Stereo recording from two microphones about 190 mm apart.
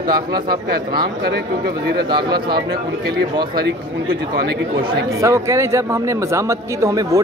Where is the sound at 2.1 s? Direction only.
25° right (ahead or behind).